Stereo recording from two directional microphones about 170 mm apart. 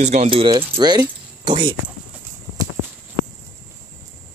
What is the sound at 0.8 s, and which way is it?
Keys jangling, 25° right (ahead or behind).